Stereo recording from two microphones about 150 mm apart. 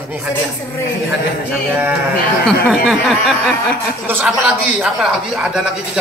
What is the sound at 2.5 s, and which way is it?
Speech, 5° right (ahead or behind).